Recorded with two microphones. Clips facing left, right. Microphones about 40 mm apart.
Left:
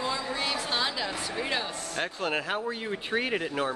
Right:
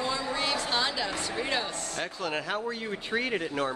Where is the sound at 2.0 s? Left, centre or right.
Left.